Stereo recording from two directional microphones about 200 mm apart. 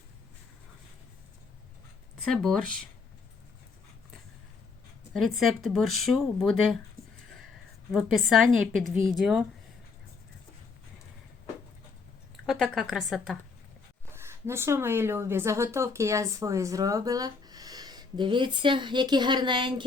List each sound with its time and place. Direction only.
2.2 s speech: centre (ahead or behind)
5.1 s speech: centre (ahead or behind)
7.9 s speech: centre (ahead or behind)
12.5 s speech: centre (ahead or behind)
14.1 s speech: 10° right (ahead or behind)